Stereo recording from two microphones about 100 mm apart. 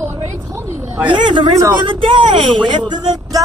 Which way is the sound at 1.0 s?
50° right (ahead or behind).